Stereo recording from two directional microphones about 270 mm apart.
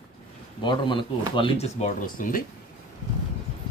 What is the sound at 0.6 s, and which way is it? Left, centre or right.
Speech, centre.